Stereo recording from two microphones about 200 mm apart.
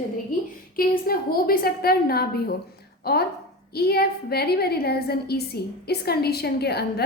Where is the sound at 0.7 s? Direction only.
45° left (ahead or behind).